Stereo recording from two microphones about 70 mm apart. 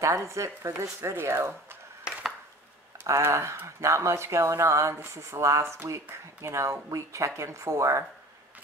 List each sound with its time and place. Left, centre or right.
0.0 s speech: right
3.1 s speech: right